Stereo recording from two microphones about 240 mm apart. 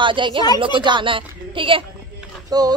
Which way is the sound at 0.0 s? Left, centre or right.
Right.